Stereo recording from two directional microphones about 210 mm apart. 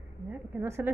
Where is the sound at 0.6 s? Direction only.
10° right (ahead or behind).